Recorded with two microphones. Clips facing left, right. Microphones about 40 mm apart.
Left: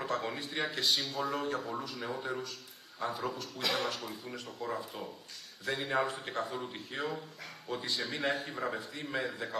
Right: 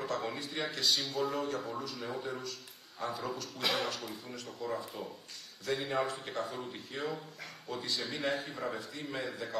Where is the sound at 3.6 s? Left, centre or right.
Centre.